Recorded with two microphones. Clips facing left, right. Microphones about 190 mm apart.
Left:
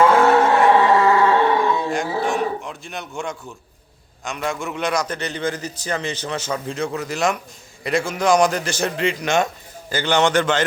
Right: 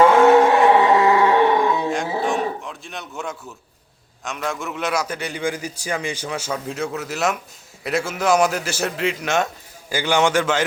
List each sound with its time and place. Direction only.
0.0 s a sound: 20° right (ahead or behind)
2.2 s livestock: centre (ahead or behind)
4.2 s a man's voice: centre (ahead or behind)